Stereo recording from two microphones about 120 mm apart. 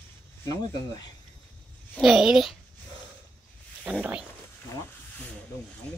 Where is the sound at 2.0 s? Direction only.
Centre (ahead or behind).